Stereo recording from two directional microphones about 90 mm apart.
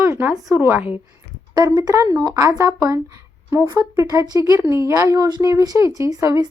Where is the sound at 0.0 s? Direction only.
25° right (ahead or behind).